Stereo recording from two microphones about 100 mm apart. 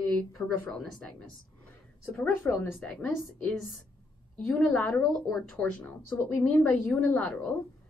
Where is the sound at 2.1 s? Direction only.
15° left (ahead or behind).